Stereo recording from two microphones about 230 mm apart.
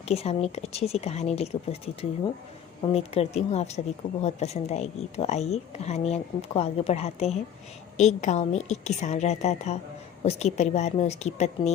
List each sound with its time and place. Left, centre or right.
0.0 s speech: left